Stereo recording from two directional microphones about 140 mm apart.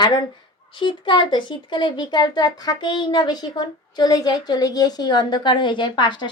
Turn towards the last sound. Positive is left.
turn(degrees=35)  # may be behind; listen again after turning